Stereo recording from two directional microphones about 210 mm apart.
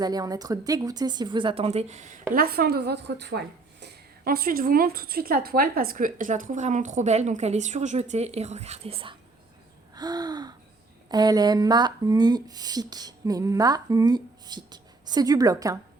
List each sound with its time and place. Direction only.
0.0 s speech: 20° right (ahead or behind); by 2.1 s 35° right (ahead or behind)
2.3 s a woman's voice: 45° right (ahead or behind); by 9.1 s 25° right (ahead or behind)
9.9 s gasp: 20° right (ahead or behind)
11.1 s speech: 20° right (ahead or behind)